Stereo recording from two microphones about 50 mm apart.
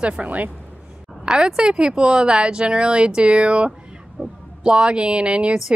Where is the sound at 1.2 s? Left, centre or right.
Centre.